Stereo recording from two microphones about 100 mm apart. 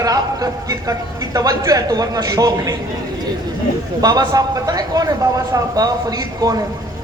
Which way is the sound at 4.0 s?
40° right (ahead or behind).